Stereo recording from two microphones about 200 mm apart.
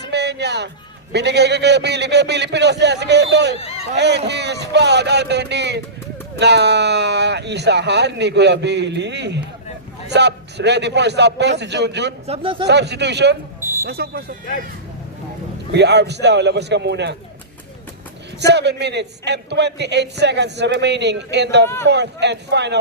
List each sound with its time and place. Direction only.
0.0 s music: 55° right (ahead or behind)
1.1 s a man's voice: 55° right (ahead or behind)
3.6 s a sound: 30° left (ahead or behind)
3.9 s a man's voice: 55° right (ahead or behind)
12.2 s a man's voice: 30° right (ahead or behind)
12.6 s a man's voice: 55° right (ahead or behind)
13.6 s a sound: 10° right (ahead or behind)
13.8 s speech: 50° right (ahead or behind)
15.7 s a man's voice: 60° right (ahead or behind)
18.3 s a man's voice: 55° right (ahead or behind)